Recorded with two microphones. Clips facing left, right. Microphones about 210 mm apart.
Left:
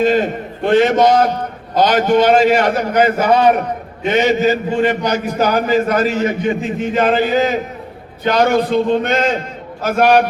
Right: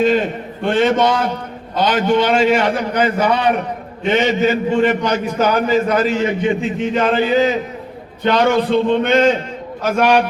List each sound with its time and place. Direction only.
0.0 s a man's voice: 40° left (ahead or behind)